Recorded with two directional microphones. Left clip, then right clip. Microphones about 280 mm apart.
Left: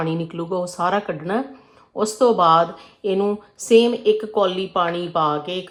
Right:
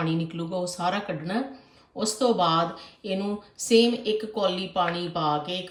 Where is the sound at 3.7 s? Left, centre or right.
Centre.